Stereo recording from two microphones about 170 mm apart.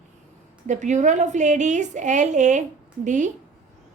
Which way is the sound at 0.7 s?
45° right (ahead or behind).